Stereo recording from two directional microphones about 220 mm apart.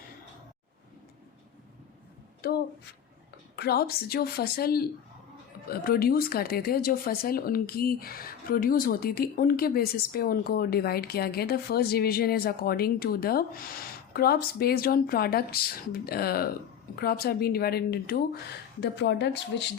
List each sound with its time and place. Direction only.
2.4 s speech: 45° left (ahead or behind)